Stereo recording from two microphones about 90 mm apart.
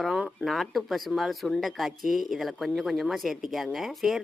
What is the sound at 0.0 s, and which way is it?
Speech, centre (ahead or behind).